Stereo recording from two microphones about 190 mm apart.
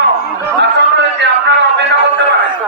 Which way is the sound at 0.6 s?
65° right (ahead or behind).